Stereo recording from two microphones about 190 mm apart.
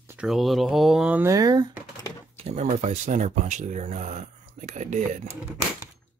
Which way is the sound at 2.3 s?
35° right (ahead or behind).